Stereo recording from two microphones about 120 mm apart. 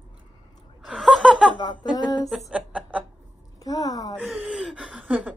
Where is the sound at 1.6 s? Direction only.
35° left (ahead or behind).